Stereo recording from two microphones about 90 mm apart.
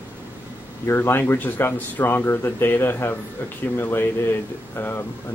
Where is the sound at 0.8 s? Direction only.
25° left (ahead or behind).